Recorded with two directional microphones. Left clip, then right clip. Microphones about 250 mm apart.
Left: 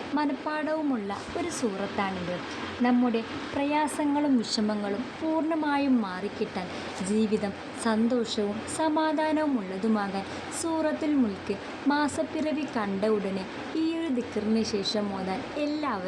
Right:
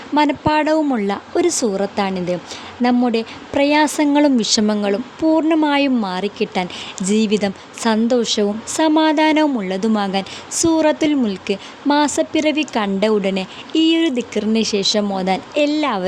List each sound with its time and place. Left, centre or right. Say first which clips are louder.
0.2 s a woman's voice: right 15 dB; right